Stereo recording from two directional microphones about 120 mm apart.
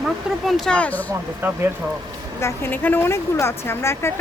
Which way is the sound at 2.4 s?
20° left (ahead or behind).